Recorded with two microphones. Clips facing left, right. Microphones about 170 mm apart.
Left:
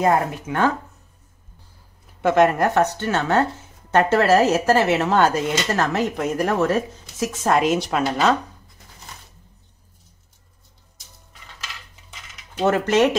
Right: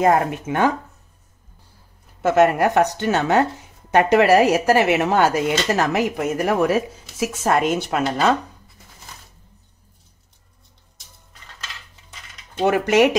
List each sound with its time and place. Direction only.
0.0 s speech: 20° right (ahead or behind)
2.2 s speech: 5° right (ahead or behind)
12.6 s speech: 10° right (ahead or behind)